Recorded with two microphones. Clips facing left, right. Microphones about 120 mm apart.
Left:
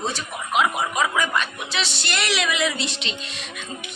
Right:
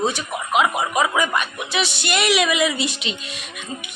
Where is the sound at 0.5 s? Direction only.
5° right (ahead or behind).